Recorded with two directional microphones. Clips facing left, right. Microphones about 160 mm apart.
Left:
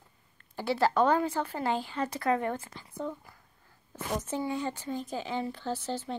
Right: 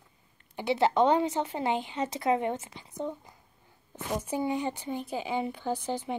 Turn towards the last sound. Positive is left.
turn(degrees=-15)  # may be behind; listen again after turning